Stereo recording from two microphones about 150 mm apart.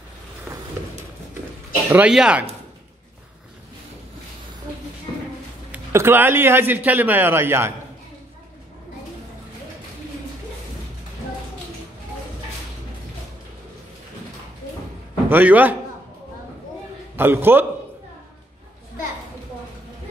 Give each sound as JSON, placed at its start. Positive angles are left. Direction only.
{"t": 1.9, "sound": "a man's voice", "side_deg": -10}
{"t": 5.7, "sound": "a man's voice", "side_deg": -15}
{"t": 15.2, "sound": "a man's voice", "side_deg": -10}
{"t": 17.2, "sound": "a man's voice", "side_deg": -15}